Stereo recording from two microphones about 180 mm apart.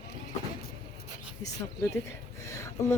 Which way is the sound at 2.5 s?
15° left (ahead or behind).